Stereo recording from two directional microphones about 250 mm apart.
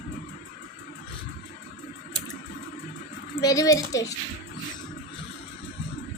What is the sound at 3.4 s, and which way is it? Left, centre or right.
Speech, centre.